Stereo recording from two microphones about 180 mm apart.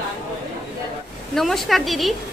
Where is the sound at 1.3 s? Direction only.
Centre (ahead or behind).